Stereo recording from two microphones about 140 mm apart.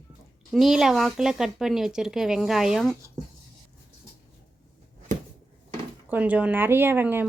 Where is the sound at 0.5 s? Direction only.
Centre (ahead or behind).